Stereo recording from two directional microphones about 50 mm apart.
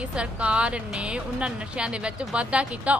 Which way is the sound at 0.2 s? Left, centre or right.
Right.